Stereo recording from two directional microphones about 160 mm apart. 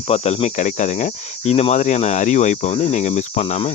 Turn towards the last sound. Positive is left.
turn(degrees=40)  # may be behind; listen again after turning